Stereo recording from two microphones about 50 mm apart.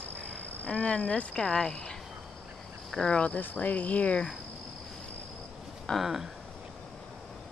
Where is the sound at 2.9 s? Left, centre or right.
Centre.